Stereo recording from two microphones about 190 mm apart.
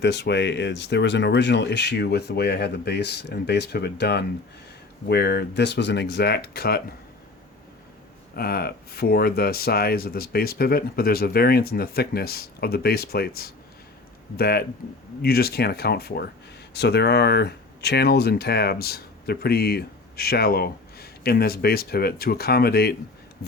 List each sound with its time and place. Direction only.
0.0 s speech: 65° left (ahead or behind)
8.4 s speech: 55° left (ahead or behind)